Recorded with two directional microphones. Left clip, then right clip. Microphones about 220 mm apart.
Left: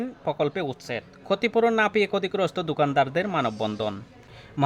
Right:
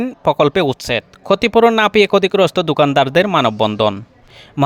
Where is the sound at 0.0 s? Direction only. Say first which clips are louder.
Right 12 dB; 45° right (ahead or behind).